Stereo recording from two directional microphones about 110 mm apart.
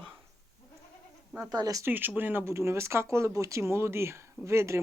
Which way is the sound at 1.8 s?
15° right (ahead or behind).